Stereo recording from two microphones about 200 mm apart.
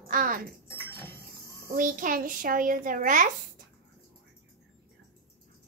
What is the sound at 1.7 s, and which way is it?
A child's voice, 45° right (ahead or behind).